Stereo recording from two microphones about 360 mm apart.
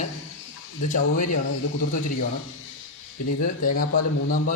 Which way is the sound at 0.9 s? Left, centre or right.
Left.